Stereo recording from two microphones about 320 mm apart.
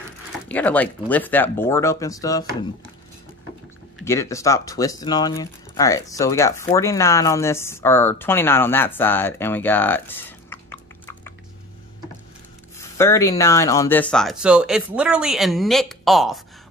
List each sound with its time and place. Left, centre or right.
0.5 s speech: centre
4.0 s speech: centre
12.7 s speech: centre